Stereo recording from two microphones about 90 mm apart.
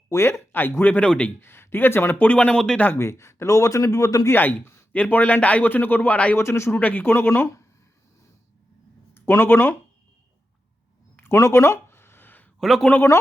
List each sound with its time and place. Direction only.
0.1 s speech: 30° left (ahead or behind); by 1.3 s 15° left (ahead or behind)
1.4 s speech: 25° left (ahead or behind); by 2.8 s 10° left (ahead or behind)
3.0 s speech: 30° left (ahead or behind)
4.3 s speech: 20° left (ahead or behind)
6.3 s speech: 30° left (ahead or behind)
9.1 s speech: 25° left (ahead or behind)
11.2 s a sound: 30° left (ahead or behind)
12.5 s speech: centre (ahead or behind)
12.9 s speech: 25° left (ahead or behind)